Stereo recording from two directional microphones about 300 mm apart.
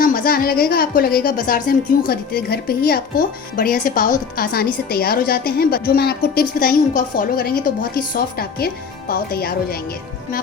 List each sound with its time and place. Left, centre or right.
0.0 s a woman's voice: left